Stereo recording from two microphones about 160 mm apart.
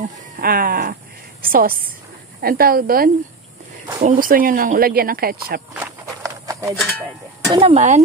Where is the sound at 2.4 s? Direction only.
70° right (ahead or behind).